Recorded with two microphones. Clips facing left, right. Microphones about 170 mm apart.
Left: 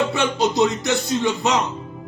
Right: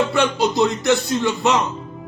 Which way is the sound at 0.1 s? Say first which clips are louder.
Right 2 dB; 20° left (ahead or behind).